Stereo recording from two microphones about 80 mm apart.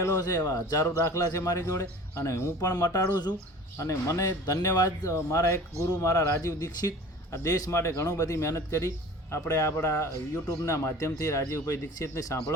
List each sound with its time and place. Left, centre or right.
0.0 s speech: left
3.8 s speech: left
5.1 s speech: left